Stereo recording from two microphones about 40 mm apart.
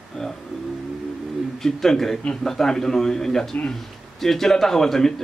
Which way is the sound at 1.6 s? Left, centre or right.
Centre.